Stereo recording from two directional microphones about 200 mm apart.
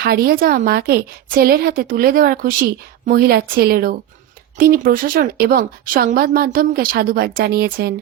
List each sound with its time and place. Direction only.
0.0 s speech: 50° right (ahead or behind)